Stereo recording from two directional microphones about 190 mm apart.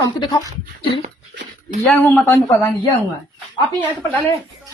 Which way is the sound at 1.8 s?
5° left (ahead or behind).